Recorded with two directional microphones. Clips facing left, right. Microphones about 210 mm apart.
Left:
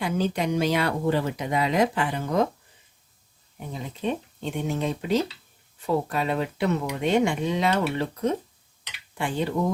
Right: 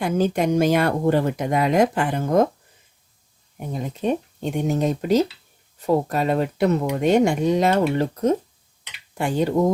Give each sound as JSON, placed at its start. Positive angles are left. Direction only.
{"t": 0.0, "sound": "speech", "side_deg": -50}
{"t": 3.7, "sound": "speech", "side_deg": -45}